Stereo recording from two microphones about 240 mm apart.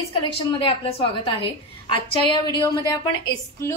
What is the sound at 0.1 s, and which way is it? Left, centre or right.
A woman's voice, left.